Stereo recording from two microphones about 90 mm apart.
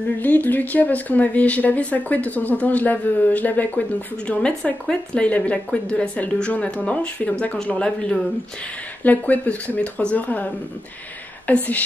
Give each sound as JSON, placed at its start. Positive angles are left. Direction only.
{"t": 0.2, "sound": "speech", "side_deg": 20}